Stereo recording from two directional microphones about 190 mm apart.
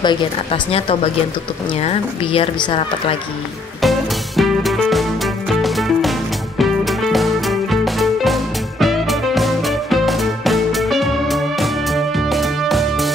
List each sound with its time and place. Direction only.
0.0 s speech: 25° left (ahead or behind)
3.8 s music: centre (ahead or behind)